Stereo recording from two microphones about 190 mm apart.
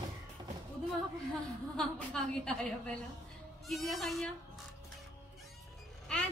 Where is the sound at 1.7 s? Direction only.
5° left (ahead or behind).